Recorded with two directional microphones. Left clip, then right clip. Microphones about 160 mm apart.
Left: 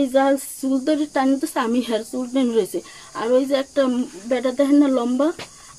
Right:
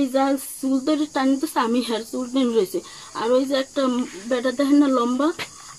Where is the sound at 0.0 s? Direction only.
30° left (ahead or behind).